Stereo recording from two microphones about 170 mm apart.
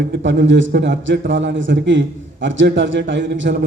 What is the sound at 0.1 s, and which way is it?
A man's voice, 90° right.